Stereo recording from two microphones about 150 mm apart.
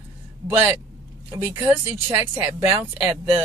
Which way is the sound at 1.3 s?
20° right (ahead or behind).